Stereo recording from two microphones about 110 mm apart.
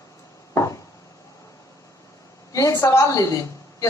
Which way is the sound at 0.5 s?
30° left (ahead or behind).